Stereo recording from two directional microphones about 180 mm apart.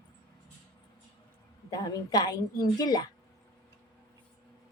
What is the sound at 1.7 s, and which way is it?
A woman's voice, 20° left (ahead or behind).